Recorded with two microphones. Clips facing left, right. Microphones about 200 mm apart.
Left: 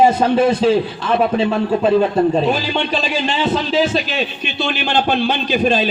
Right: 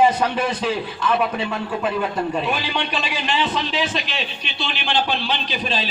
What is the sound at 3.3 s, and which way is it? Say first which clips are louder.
A man's voice: left 6 dB; 45° left (ahead or behind).